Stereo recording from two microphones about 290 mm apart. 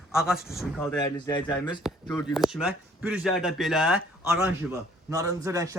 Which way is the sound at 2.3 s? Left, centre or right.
Centre.